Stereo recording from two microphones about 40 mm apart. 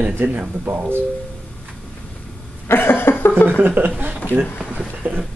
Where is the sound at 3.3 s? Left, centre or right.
Left.